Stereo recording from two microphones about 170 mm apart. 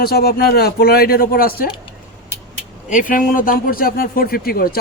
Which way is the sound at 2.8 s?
50° left (ahead or behind).